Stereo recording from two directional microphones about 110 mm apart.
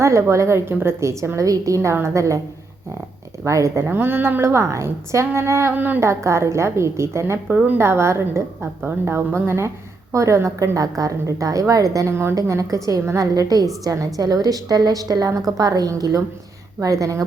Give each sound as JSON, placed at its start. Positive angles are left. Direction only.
{"t": 0.0, "sound": "a woman's voice", "side_deg": -25}
{"t": 3.4, "sound": "a woman's voice", "side_deg": -30}